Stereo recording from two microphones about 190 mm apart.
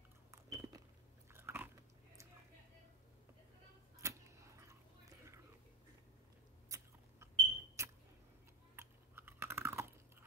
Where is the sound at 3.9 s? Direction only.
15° right (ahead or behind).